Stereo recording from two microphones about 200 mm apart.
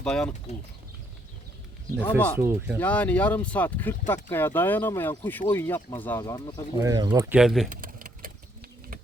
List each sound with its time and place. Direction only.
0.0 s speech: 5° left (ahead or behind)
2.0 s speech: 10° left (ahead or behind)
2.4 s speech: 10° right (ahead or behind)
2.7 s speech: 5° left (ahead or behind)
6.8 s speech: 20° right (ahead or behind)
7.3 s speech: centre (ahead or behind)
7.7 s keys jangling: 45° right (ahead or behind)